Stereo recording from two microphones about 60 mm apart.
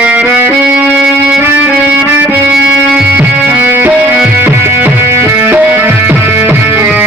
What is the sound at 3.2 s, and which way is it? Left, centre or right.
Music, right.